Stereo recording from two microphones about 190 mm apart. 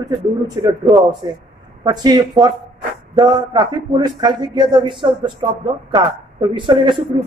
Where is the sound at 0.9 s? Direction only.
20° right (ahead or behind).